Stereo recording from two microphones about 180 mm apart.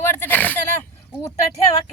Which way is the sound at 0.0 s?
10° left (ahead or behind).